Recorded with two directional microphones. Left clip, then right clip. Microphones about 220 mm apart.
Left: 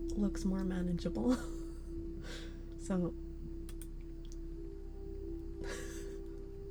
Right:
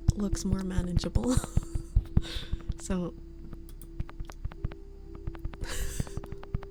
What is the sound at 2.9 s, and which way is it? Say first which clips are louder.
Speech: right 3 dB; 15° right (ahead or behind).